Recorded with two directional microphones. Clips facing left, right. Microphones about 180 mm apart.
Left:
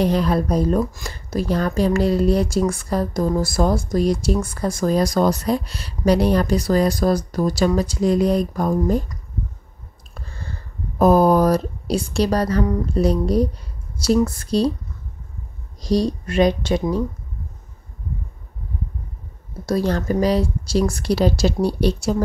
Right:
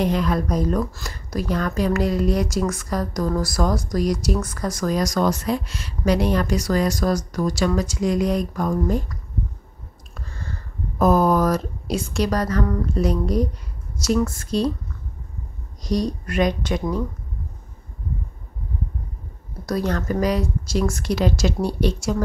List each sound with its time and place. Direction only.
0.0 s speech: 35° left (ahead or behind)
10.1 s a sound: 30° left (ahead or behind)
11.0 s speech: 35° left (ahead or behind)
15.8 s speech: 30° left (ahead or behind)
19.6 s speech: 30° left (ahead or behind)